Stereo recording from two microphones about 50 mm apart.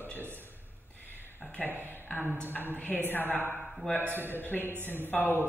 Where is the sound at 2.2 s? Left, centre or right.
Right.